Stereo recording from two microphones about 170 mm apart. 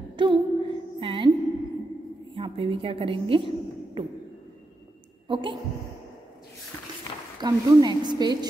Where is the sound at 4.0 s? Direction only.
30° right (ahead or behind).